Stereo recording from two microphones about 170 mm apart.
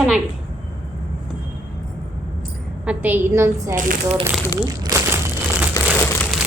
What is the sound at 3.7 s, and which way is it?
Speech, 50° right (ahead or behind).